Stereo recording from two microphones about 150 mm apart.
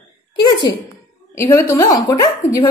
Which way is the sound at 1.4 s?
20° left (ahead or behind).